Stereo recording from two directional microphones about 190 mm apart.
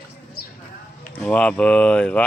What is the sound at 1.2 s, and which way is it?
Speech, 5° left (ahead or behind).